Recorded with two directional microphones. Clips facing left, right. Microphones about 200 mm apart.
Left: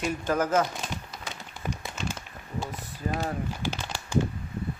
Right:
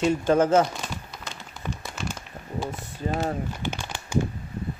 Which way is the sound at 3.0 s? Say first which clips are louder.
Right 3 dB; 25° right (ahead or behind).